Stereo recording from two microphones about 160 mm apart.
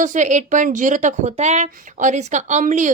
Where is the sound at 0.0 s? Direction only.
50° right (ahead or behind).